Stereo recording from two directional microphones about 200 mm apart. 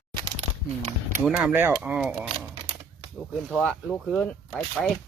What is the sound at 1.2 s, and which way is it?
Speech, 5° right (ahead or behind).